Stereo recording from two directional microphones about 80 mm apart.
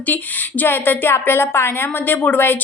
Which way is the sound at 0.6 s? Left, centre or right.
Left.